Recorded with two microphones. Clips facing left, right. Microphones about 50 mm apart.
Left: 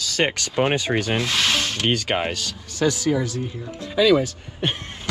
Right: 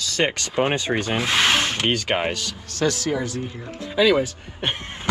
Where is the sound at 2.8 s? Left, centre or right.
Centre.